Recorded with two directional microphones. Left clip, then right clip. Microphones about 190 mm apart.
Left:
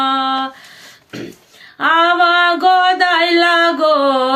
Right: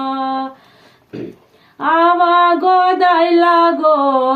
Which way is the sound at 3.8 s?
20° left (ahead or behind).